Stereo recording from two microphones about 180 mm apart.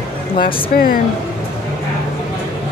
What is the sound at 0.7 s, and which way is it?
Speech, 55° left (ahead or behind).